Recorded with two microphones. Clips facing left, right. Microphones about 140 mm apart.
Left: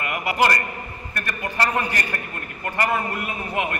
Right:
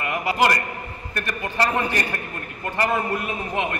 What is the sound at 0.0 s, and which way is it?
Speech, 20° right (ahead or behind).